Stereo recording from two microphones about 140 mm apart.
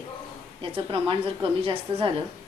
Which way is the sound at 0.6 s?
40° right (ahead or behind).